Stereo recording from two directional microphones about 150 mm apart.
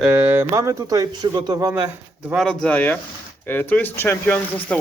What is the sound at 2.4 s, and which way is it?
Speech, 5° left (ahead or behind).